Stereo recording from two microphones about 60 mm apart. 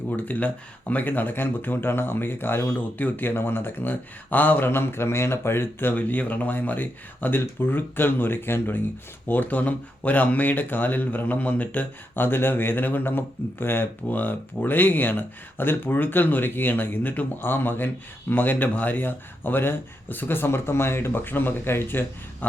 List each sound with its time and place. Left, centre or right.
0.2 s speech: left
5.9 s speech: left